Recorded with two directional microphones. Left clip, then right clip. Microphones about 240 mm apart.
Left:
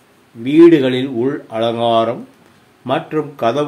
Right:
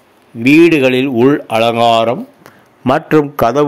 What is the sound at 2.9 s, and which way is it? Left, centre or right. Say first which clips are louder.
Speech: right 7 dB; right.